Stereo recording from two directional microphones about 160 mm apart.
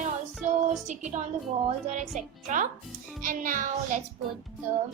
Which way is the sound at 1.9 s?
50° right (ahead or behind).